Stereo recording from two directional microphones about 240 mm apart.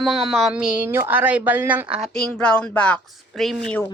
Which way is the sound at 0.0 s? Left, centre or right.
Centre.